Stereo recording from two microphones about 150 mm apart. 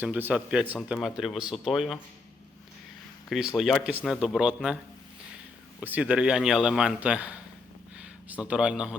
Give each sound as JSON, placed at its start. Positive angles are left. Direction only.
{"t": 0.0, "sound": "speech", "side_deg": -10}
{"t": 3.2, "sound": "speech", "side_deg": 0}
{"t": 5.8, "sound": "speech", "side_deg": -10}